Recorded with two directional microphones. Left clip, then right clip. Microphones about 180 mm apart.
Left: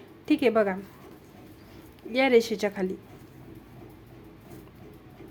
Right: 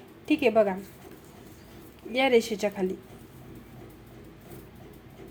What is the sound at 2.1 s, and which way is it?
Speech, 10° left (ahead or behind).